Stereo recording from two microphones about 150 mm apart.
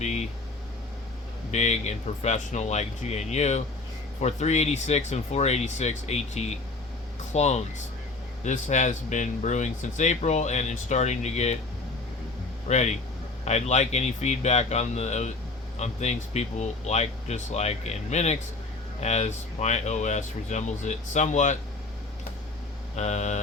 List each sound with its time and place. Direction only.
0.0 s a sound: 50° left (ahead or behind)
1.5 s speech: 50° left (ahead or behind)
12.6 s speech: 50° left (ahead or behind)
23.0 s speech: 50° left (ahead or behind)